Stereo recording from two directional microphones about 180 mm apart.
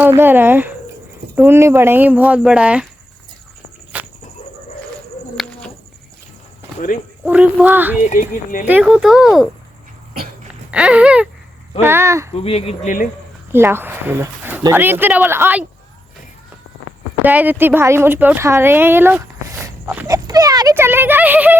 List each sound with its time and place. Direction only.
0.0 s speech: 10° right (ahead or behind)
3.9 s a sound: 10° right (ahead or behind)
5.4 s bird: centre (ahead or behind)
7.3 s speech: 10° right (ahead or behind)
8.0 s speech: 45° left (ahead or behind)
8.6 s speech: 5° right (ahead or behind)
10.7 s speech: 5° right (ahead or behind)
12.3 s speech: 35° left (ahead or behind)
13.5 s speech: 10° right (ahead or behind)
17.2 s speech: 10° right (ahead or behind)